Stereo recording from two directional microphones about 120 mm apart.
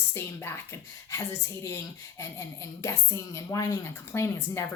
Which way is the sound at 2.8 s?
25° left (ahead or behind).